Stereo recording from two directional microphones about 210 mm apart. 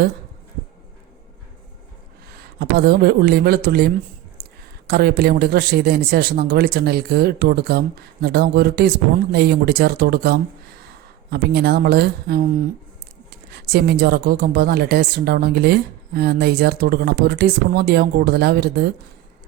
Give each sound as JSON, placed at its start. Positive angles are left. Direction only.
{"t": 2.6, "sound": "a woman's voice", "side_deg": -50}
{"t": 4.4, "sound": "a sound", "side_deg": -45}
{"t": 4.9, "sound": "a woman's voice", "side_deg": -50}